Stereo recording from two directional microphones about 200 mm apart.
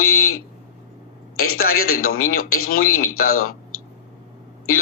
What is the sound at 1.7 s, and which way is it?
Speech, 90° left.